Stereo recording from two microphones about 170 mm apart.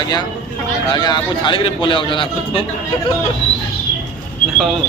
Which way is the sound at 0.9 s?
25° left (ahead or behind).